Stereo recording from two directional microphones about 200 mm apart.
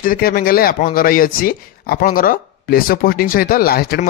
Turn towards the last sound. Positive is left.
turn(degrees=50)  # may be behind; listen again after turning